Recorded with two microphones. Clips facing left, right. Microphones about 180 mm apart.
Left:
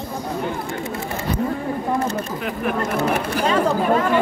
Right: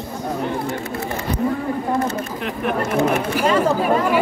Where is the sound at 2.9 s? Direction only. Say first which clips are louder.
Right 2 dB; 5° right (ahead or behind).